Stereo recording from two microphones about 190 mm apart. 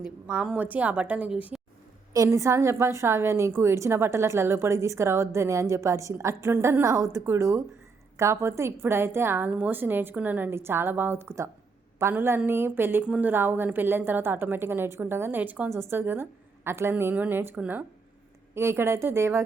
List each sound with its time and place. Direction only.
0.0 s a woman's voice: 5° right (ahead or behind)
2.1 s a woman's voice: 15° right (ahead or behind)